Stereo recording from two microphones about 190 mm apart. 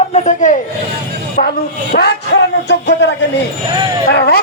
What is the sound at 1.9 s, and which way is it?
A man's voice, 60° left (ahead or behind).